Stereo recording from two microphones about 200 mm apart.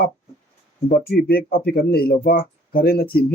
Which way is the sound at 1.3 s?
50° left (ahead or behind).